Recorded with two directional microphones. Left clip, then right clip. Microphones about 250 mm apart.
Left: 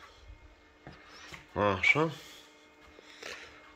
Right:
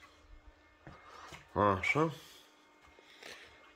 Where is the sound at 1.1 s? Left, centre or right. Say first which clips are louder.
Even; right.